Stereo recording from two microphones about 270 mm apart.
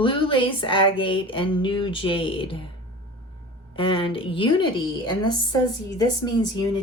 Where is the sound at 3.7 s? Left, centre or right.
Centre.